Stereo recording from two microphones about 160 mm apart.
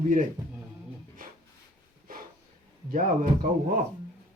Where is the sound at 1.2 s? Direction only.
60° right (ahead or behind).